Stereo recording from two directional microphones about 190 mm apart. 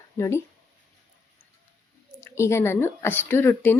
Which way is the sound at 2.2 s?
15° left (ahead or behind).